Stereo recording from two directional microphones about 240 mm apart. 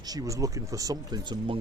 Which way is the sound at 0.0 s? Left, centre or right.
Centre.